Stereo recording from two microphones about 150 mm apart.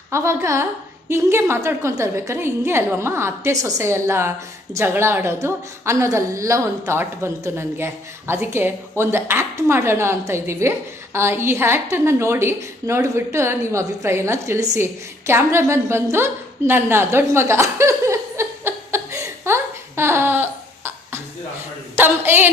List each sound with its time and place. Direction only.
0.1 s a woman's voice: 20° right (ahead or behind)
15.3 s a sound: 15° right (ahead or behind)
21.9 s a woman's voice: 15° right (ahead or behind)